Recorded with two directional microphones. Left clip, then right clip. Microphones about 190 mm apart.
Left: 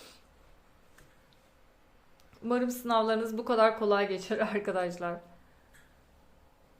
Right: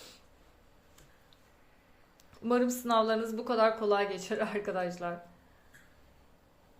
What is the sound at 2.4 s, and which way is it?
Speech, centre (ahead or behind).